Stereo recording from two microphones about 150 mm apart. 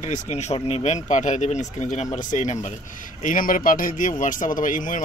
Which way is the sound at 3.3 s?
65° left (ahead or behind).